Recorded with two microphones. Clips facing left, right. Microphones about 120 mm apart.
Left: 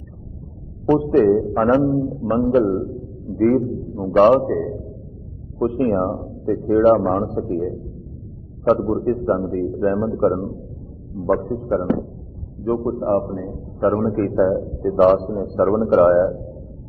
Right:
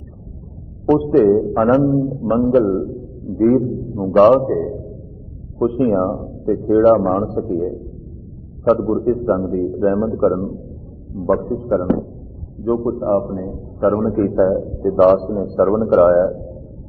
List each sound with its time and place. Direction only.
1.2 s a man's voice: centre (ahead or behind)